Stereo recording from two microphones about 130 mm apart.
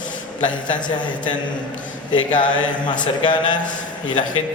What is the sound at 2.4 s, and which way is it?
A man's voice, 35° left (ahead or behind).